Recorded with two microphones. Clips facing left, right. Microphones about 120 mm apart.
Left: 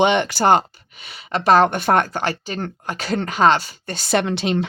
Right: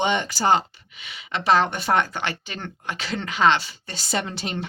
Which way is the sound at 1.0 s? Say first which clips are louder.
Left 5 dB; 40° left (ahead or behind).